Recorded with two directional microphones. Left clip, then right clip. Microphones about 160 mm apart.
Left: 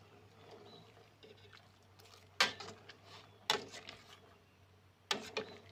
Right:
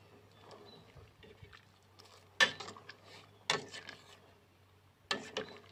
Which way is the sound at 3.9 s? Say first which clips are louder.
Right 2 dB; 10° right (ahead or behind).